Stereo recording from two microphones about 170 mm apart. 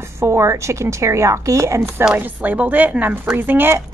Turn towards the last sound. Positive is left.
turn(degrees=-15)  # may be behind; listen again after turning